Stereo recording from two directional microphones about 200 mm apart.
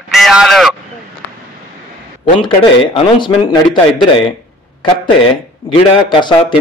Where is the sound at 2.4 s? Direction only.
25° left (ahead or behind).